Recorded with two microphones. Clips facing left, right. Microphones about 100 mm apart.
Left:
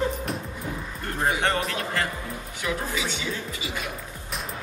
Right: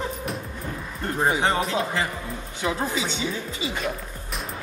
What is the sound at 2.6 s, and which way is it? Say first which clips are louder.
Music: right 3 dB; 30° right (ahead or behind).